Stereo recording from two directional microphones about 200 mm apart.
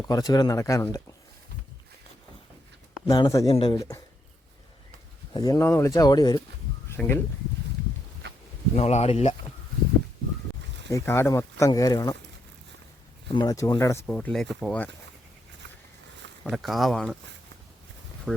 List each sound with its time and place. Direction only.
0.0 s speech: 20° left (ahead or behind)
3.1 s speech: 20° left (ahead or behind)
5.3 s speech: 20° left (ahead or behind)
8.7 s speech: 35° left (ahead or behind)
10.9 s speech: 15° left (ahead or behind)
13.2 s speech: 20° left (ahead or behind); by 14.8 s 5° left (ahead or behind)
16.4 s speech: centre (ahead or behind)
18.3 s speech: centre (ahead or behind)